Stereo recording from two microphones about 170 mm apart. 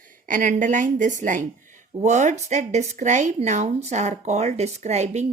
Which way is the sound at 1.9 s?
45° right (ahead or behind).